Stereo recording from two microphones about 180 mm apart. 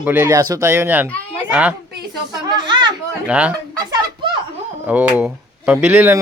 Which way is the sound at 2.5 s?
25° right (ahead or behind).